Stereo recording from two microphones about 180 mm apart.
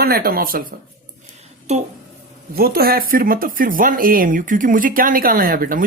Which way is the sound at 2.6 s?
55° right (ahead or behind).